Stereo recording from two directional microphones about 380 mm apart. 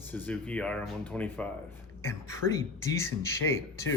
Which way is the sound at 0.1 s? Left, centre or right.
Centre.